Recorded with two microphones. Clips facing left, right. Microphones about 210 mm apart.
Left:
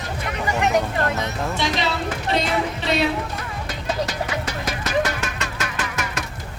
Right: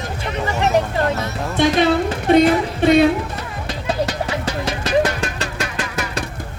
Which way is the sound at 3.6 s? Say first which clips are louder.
Right 4 dB; 30° right (ahead or behind).